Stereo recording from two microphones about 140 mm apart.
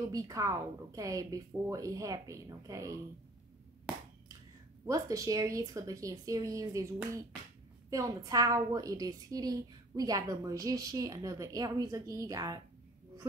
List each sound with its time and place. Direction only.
0.1 s a woman's voice: 25° right (ahead or behind)
3.9 s a sound: 10° right (ahead or behind)
4.8 s a woman's voice: 25° right (ahead or behind)
7.9 s a woman's voice: 25° right (ahead or behind)